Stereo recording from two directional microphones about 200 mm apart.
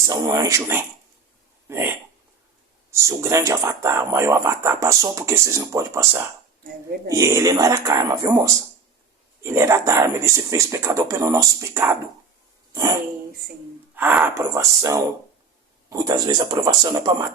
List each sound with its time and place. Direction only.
0.0 s speech: 20° right (ahead or behind)
1.6 s a sound: 10° right (ahead or behind)
2.9 s speech: 15° right (ahead or behind)
7.1 s speech: 15° right (ahead or behind)